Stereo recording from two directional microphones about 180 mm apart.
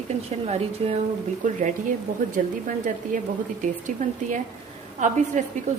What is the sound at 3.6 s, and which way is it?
A woman's voice, 45° right (ahead or behind).